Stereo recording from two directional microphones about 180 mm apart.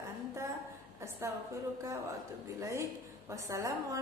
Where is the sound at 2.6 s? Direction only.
15° right (ahead or behind).